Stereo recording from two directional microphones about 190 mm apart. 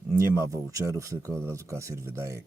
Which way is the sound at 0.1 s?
15° right (ahead or behind).